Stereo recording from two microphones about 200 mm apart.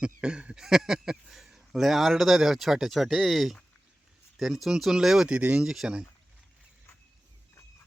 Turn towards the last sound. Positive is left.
turn(degrees=-5)  # may be behind; listen again after turning